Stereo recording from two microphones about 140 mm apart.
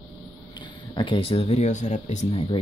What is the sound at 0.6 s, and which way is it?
Speech, 35° left (ahead or behind).